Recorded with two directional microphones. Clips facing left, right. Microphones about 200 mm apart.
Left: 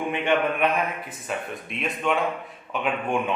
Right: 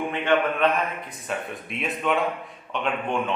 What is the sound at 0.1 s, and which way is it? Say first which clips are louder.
Speech: even; 15° left (ahead or behind).